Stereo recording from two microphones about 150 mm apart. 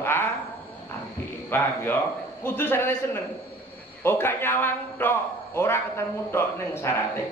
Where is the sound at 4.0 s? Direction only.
15° left (ahead or behind).